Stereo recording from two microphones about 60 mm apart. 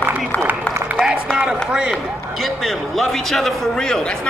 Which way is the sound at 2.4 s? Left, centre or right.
Centre.